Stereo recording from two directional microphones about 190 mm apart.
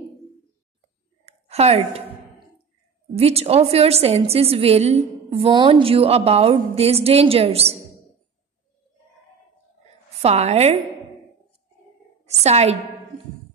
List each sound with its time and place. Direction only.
1.2 s a sound: 35° right (ahead or behind)
3.2 s a woman's voice: 30° right (ahead or behind)
10.2 s a woman's voice: 35° right (ahead or behind)
12.3 s a woman's voice: 35° right (ahead or behind)